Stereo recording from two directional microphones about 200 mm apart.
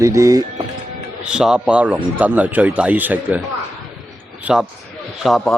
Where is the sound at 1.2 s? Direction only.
5° right (ahead or behind).